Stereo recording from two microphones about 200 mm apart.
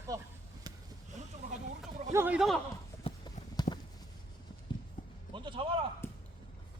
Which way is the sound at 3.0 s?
20° left (ahead or behind).